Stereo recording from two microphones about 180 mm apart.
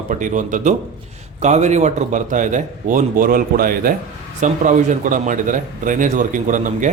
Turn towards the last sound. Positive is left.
turn(degrees=-45)  # may be behind; listen again after turning